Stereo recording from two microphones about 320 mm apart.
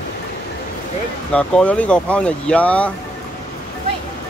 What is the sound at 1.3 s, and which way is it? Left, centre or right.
Speech, centre.